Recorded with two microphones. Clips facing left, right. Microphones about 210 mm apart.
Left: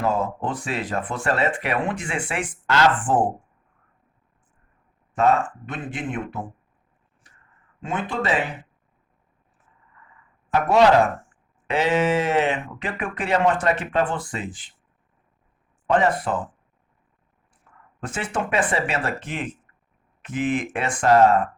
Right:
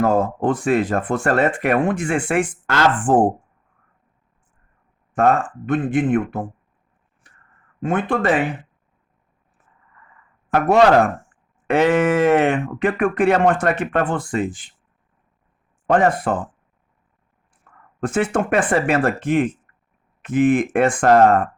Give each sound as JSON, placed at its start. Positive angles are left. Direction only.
{"t": 0.0, "sound": "speech", "side_deg": -50}
{"t": 5.1, "sound": "speech", "side_deg": -50}
{"t": 7.3, "sound": "a sound", "side_deg": -55}
{"t": 7.8, "sound": "speech", "side_deg": -55}
{"t": 10.5, "sound": "speech", "side_deg": -50}
{"t": 15.9, "sound": "speech", "side_deg": -50}
{"t": 17.7, "sound": "a sound", "side_deg": -60}
{"t": 18.0, "sound": "speech", "side_deg": -50}